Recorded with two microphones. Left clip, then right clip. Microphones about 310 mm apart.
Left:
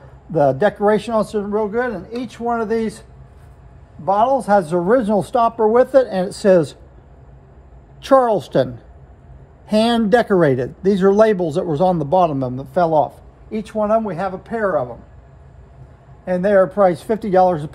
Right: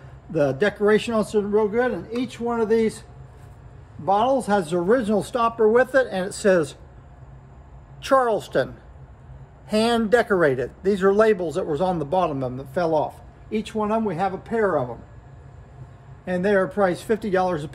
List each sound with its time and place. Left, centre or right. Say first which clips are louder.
0.3 s a man's voice: left 6 dB; centre
8.0 s speech: left 6 dB; centre
10.2 s speech: left 4 dB; centre
13.1 s a man's voice: left 1 dB; centre
16.3 s speech: left 7 dB; centre